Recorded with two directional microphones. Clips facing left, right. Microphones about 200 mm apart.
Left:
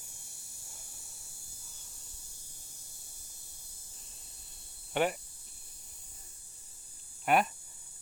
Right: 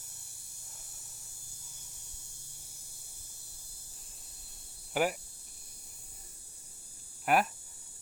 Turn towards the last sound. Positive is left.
turn(degrees=0)  # may be behind; listen again after turning